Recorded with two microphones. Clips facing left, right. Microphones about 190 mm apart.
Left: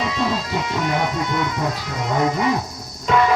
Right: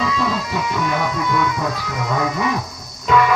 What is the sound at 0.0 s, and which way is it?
Speech, 25° left (ahead or behind).